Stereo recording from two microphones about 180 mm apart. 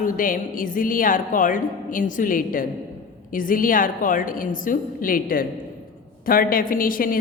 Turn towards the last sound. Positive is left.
turn(degrees=50)  # may be behind; listen again after turning